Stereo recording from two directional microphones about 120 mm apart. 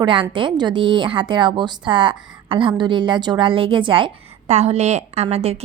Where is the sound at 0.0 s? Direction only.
45° right (ahead or behind).